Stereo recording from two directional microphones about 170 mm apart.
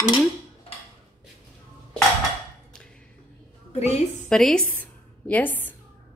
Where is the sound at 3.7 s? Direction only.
40° left (ahead or behind).